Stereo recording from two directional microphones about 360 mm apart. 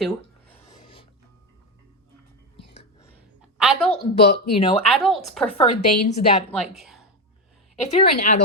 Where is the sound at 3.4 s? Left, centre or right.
Centre.